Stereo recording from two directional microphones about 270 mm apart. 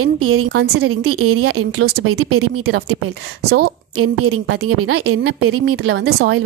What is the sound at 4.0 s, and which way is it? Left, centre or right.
A woman's voice, right.